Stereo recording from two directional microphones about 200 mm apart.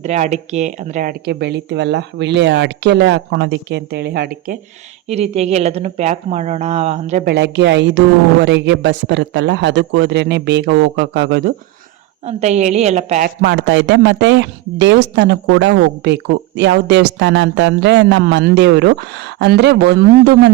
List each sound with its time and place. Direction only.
0.0 s speech: 35° right (ahead or behind)
1.2 s speech: 55° right (ahead or behind)
5.0 s speech: 30° right (ahead or behind)
7.3 s speech: 60° right (ahead or behind)
12.2 s speech: 35° right (ahead or behind)
13.2 s speech: 55° right (ahead or behind)